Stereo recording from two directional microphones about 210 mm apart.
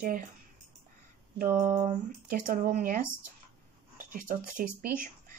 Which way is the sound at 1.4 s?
40° right (ahead or behind).